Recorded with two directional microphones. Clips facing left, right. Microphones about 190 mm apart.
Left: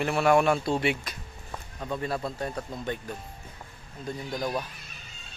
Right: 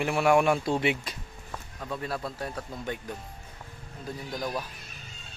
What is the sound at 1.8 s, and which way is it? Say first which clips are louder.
Speech: left 3 dB; centre (ahead or behind).